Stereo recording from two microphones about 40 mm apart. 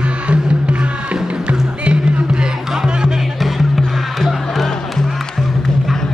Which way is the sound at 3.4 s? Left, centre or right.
Centre.